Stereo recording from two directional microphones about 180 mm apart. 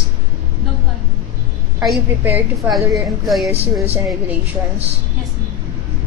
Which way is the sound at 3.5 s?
35° right (ahead or behind).